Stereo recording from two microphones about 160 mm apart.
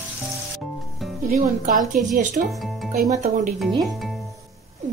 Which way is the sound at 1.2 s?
60° right (ahead or behind).